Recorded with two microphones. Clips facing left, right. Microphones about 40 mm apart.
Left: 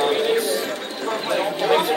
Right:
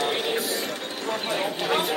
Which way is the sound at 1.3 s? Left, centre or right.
Centre.